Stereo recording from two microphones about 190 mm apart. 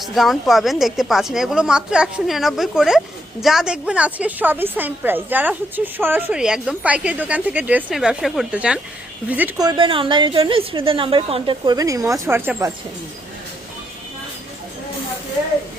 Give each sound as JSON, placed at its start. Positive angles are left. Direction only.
{"t": 0.0, "sound": "a woman's voice", "side_deg": 0}
{"t": 9.6, "sound": "a woman's voice", "side_deg": -25}